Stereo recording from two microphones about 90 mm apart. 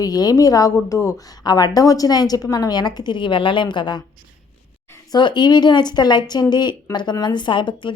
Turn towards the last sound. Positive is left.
turn(degrees=65)  # may be behind; listen again after turning